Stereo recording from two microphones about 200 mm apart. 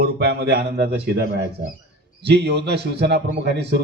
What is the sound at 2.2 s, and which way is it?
A man's voice, 55° right (ahead or behind).